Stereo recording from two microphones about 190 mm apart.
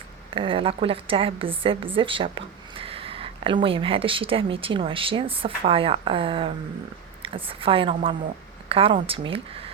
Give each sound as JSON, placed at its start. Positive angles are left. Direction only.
{"t": 0.3, "sound": "a woman's voice", "side_deg": -30}